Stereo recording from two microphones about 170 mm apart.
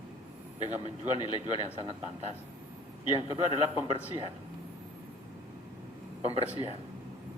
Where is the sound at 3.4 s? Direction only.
35° left (ahead or behind).